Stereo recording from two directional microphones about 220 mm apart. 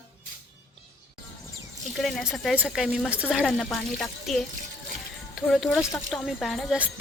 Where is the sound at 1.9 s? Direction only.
Centre (ahead or behind).